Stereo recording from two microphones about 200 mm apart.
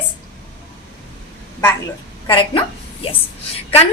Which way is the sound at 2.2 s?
25° left (ahead or behind).